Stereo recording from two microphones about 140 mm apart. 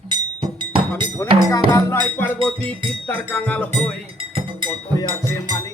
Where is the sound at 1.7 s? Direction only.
20° left (ahead or behind).